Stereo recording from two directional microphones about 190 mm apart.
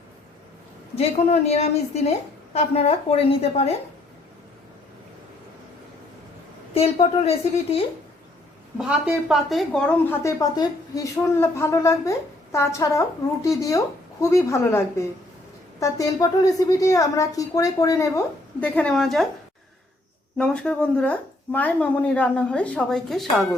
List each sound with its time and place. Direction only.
0.9 s a woman's voice: 35° left (ahead or behind)
6.7 s a woman's voice: 30° left (ahead or behind)
8.8 s speech: 5° right (ahead or behind)
10.2 s a woman's voice: 20° left (ahead or behind); by 19.2 s centre (ahead or behind)
20.4 s a woman's voice: 5° left (ahead or behind)